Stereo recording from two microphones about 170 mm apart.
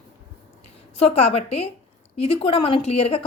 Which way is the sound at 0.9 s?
35° left (ahead or behind).